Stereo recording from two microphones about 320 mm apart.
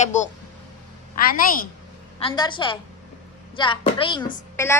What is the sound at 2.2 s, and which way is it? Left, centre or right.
A woman's voice, centre.